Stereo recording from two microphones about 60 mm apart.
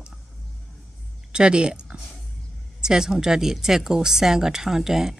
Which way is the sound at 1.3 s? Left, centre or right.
Centre.